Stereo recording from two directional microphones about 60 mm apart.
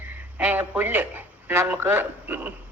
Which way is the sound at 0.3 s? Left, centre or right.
Right.